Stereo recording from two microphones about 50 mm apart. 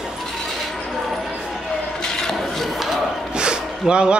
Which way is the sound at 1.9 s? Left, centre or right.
Centre.